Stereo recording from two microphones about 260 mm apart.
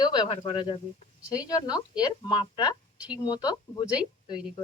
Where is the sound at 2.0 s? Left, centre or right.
Centre.